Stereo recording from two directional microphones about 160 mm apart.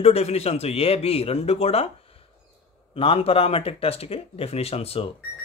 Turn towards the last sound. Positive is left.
turn(degrees=40)  # may be behind; listen again after turning